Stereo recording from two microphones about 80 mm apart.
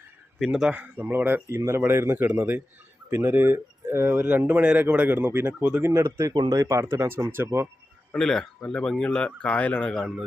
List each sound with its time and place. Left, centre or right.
0.3 s speech: centre; by 1.4 s right
1.5 s speech: right
5.9 s speech: right
8.1 s speech: centre